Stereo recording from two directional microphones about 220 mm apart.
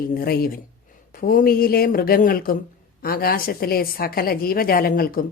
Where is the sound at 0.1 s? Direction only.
40° left (ahead or behind).